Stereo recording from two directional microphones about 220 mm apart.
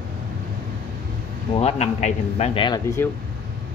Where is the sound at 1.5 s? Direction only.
30° left (ahead or behind).